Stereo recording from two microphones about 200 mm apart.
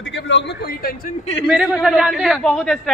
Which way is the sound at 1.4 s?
5° right (ahead or behind).